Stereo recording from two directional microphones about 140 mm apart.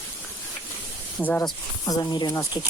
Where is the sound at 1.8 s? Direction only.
25° left (ahead or behind).